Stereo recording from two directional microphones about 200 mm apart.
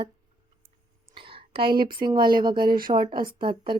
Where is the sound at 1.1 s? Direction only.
25° right (ahead or behind).